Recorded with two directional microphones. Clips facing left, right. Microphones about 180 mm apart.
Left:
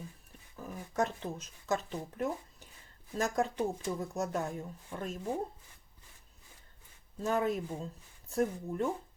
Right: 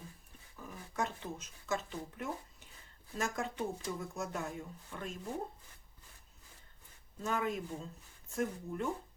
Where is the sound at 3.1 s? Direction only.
40° left (ahead or behind).